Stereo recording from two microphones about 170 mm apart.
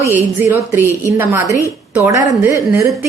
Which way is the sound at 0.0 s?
15° right (ahead or behind).